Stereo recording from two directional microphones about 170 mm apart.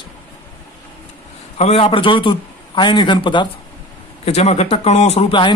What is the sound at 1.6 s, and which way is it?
A man's voice, 35° left (ahead or behind).